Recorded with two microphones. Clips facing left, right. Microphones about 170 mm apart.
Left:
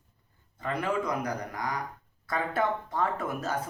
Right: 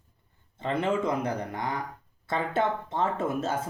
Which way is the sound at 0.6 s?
25° right (ahead or behind).